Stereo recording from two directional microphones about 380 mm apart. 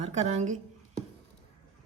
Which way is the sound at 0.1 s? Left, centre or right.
Centre.